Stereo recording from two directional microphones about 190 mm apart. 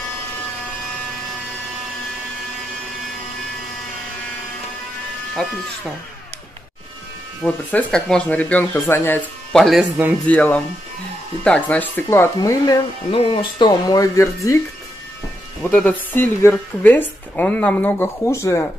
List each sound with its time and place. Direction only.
5.4 s speech: 5° left (ahead or behind)
7.4 s a woman's voice: 5° left (ahead or behind)
12.4 s speech: 20° left (ahead or behind)
15.7 s a woman's voice: 10° left (ahead or behind)